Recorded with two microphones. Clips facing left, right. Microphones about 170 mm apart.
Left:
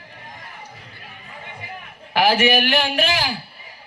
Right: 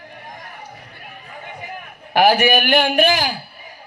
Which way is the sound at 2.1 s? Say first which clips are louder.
Right 3 dB; 50° right (ahead or behind).